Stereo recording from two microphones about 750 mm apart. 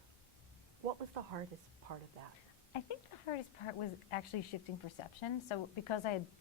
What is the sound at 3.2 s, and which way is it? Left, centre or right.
A woman's voice, left.